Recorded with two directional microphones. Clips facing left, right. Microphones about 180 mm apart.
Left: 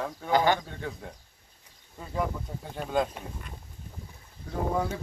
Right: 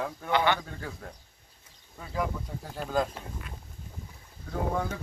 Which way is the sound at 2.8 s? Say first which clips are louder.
Left 1 dB; centre (ahead or behind).